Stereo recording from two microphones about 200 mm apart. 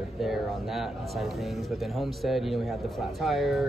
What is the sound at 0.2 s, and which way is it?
Speech, centre (ahead or behind).